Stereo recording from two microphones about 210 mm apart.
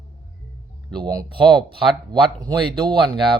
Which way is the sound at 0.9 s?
20° right (ahead or behind).